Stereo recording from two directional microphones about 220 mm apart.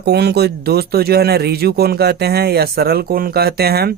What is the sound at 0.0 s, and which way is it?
Speech, 50° right (ahead or behind).